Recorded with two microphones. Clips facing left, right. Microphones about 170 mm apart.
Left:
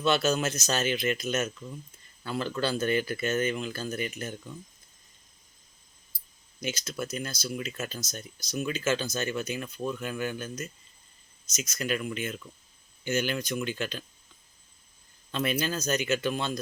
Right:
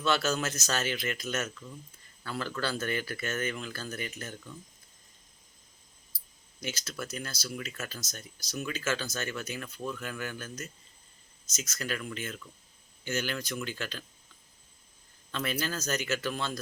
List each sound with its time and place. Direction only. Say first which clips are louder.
0.0 s speech: left 3 dB; 20° left (ahead or behind)
6.6 s speech: left 4 dB; 20° left (ahead or behind)
15.3 s speech: left 4 dB; 20° left (ahead or behind)